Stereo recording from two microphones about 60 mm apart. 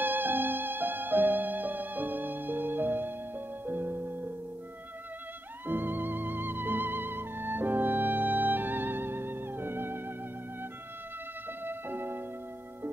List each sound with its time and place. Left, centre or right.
0.0 s music: right
5.7 s music: right
11.6 s music: right